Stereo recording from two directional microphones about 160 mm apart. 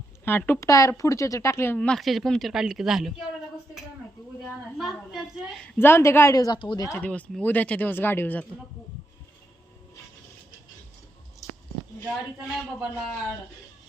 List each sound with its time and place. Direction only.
0.3 s speech: 15° left (ahead or behind)
4.8 s speech: centre (ahead or behind); by 6.8 s 30° left (ahead or behind)
6.8 s speech: 10° left (ahead or behind)
12.0 s a man's voice: 5° right (ahead or behind)